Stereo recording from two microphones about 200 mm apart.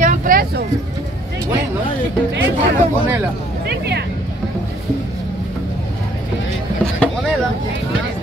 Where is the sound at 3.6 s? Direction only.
55° right (ahead or behind).